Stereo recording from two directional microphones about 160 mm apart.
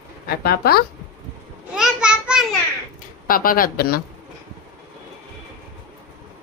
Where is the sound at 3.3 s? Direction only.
60° left (ahead or behind).